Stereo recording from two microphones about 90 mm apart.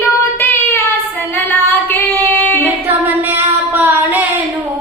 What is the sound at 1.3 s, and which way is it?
Female singing, 20° left (ahead or behind).